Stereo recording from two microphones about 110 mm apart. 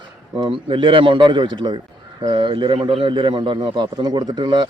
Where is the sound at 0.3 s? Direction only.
45° right (ahead or behind).